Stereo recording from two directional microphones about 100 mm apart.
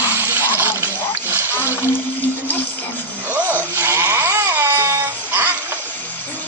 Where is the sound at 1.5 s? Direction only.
25° left (ahead or behind).